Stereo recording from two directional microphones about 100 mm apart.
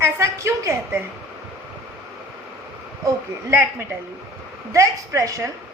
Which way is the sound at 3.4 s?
25° right (ahead or behind).